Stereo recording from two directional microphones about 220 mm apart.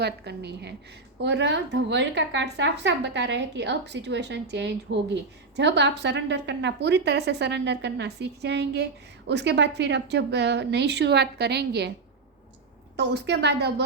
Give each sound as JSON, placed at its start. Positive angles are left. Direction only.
{"t": 0.0, "sound": "a woman's voice", "side_deg": -50}
{"t": 13.0, "sound": "a woman's voice", "side_deg": -50}